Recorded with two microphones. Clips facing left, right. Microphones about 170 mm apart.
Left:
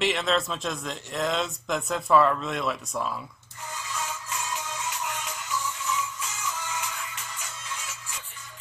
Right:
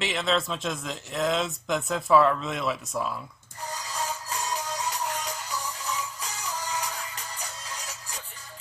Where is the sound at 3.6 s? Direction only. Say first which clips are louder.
Right 2 dB; 35° right (ahead or behind).